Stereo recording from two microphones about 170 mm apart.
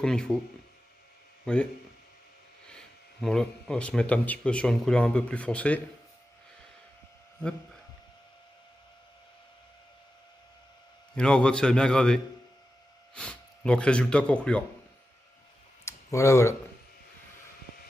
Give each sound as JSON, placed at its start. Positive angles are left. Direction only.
{"t": 0.0, "sound": "a man's voice", "side_deg": 5}
{"t": 1.4, "sound": "speech", "side_deg": 5}
{"t": 11.1, "sound": "a man's voice", "side_deg": 5}
{"t": 15.8, "sound": "a sound", "side_deg": 15}